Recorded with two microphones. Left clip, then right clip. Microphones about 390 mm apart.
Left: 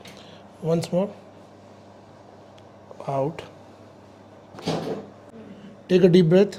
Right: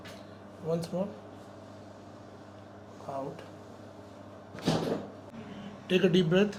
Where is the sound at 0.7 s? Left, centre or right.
Left.